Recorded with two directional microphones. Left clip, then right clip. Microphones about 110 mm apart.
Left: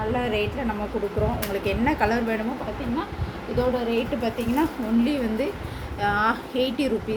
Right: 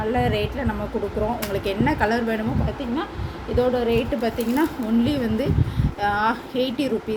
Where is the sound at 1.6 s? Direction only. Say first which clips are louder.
Right 1 dB; 10° right (ahead or behind).